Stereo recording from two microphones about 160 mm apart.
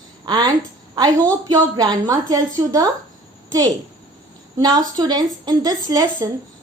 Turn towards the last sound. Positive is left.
turn(degrees=-20)  # may be behind; listen again after turning